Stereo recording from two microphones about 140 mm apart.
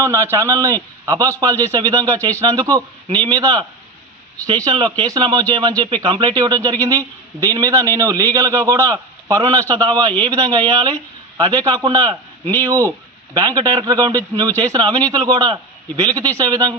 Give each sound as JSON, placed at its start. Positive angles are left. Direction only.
{"t": 0.0, "sound": "speech", "side_deg": -20}